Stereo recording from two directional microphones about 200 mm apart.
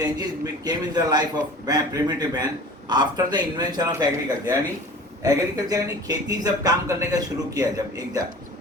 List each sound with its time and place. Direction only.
0.0 s a man's voice: 20° right (ahead or behind)